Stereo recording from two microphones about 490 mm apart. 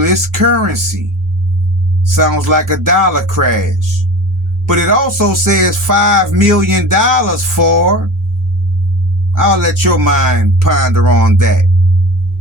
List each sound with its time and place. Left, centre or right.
0.0 s music: right
2.0 s music: right
9.3 s music: right